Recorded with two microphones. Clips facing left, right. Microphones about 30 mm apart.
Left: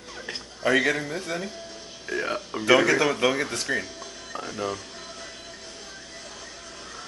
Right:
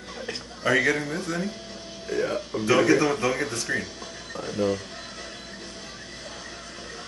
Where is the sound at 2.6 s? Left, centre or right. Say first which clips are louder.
Left 1 dB; left.